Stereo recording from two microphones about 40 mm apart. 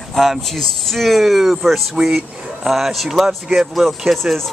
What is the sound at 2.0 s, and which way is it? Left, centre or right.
Speech, centre.